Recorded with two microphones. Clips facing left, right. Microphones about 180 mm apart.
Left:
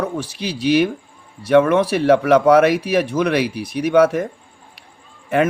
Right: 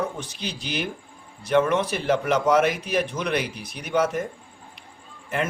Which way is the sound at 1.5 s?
65° left (ahead or behind).